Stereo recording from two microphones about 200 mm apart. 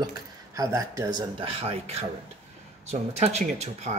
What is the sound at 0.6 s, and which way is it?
A man's voice, 15° right (ahead or behind).